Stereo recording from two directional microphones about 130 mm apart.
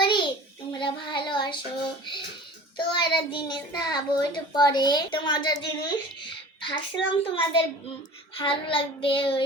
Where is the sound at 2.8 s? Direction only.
40° left (ahead or behind).